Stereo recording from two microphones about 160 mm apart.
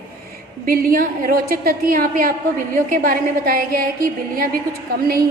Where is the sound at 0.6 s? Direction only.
60° right (ahead or behind).